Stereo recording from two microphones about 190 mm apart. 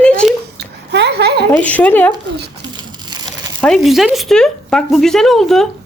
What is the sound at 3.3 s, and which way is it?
Speech, centre (ahead or behind).